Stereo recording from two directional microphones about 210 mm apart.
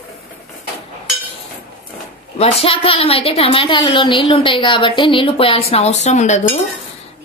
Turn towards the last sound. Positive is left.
turn(degrees=35)  # may be behind; listen again after turning